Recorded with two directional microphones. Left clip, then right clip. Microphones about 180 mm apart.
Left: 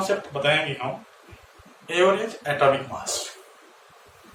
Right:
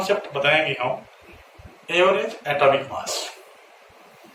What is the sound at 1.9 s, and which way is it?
Speech, 20° left (ahead or behind).